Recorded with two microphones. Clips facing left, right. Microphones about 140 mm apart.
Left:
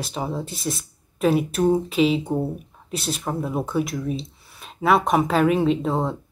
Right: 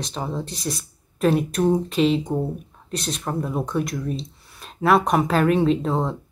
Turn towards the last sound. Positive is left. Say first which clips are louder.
# right 1 dB
turn(degrees=0)  # may be behind; listen again after turning